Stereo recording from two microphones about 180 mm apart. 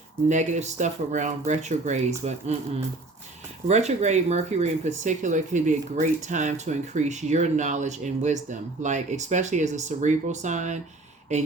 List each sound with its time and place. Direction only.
0.3 s speech: 40° right (ahead or behind)